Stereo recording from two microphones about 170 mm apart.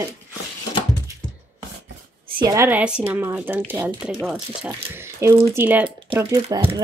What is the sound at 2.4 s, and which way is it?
A woman's voice, 15° right (ahead or behind).